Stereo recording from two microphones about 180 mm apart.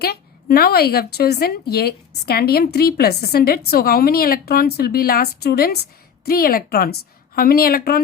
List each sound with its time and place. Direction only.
0.0 s a woman's voice: 60° left (ahead or behind)